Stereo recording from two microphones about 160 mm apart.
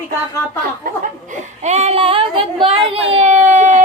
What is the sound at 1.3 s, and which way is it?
Speech, 45° right (ahead or behind).